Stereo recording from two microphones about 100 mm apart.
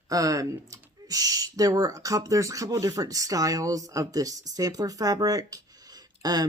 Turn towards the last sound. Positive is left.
turn(degrees=-40)  # may be behind; listen again after turning